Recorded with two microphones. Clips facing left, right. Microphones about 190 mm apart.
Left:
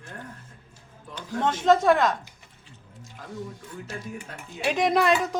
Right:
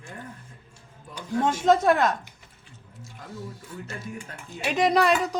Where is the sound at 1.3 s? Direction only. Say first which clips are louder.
Even; 10° right (ahead or behind).